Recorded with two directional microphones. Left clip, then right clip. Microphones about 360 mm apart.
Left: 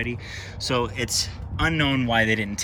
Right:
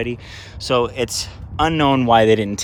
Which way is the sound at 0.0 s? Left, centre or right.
Centre.